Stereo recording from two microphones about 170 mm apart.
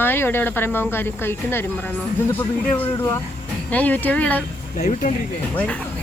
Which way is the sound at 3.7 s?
10° left (ahead or behind).